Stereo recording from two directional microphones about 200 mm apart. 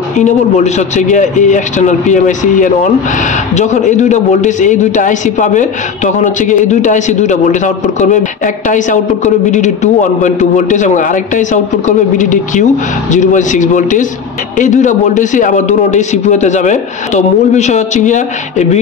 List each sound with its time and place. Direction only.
0.2 s a man's voice: 35° left (ahead or behind)